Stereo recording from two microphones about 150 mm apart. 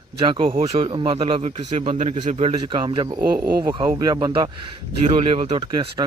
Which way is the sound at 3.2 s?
85° right.